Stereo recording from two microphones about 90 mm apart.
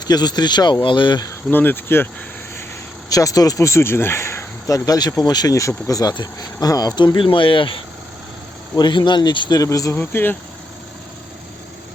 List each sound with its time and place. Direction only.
0.1 s speech: 50° left (ahead or behind)
1.5 s cricket: 20° left (ahead or behind)
3.1 s speech: 40° left (ahead or behind); by 7.8 s 75° left (ahead or behind)
8.7 s speech: 55° left (ahead or behind)
9.6 s speech: 40° left (ahead or behind)
9.9 s cricket: 25° left (ahead or behind)